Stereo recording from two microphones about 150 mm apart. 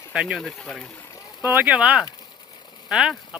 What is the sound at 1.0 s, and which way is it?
Rowboat, 25° left (ahead or behind).